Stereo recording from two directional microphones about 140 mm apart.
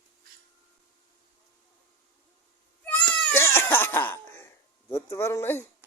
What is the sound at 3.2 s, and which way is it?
Cough, 15° left (ahead or behind).